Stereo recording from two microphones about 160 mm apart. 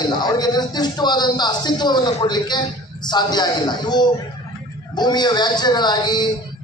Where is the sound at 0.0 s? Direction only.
25° left (ahead or behind).